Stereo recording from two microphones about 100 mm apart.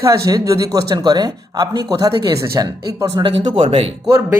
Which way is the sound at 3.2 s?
60° right (ahead or behind).